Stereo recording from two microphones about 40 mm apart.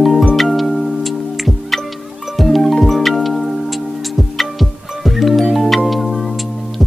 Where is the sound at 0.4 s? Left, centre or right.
Centre.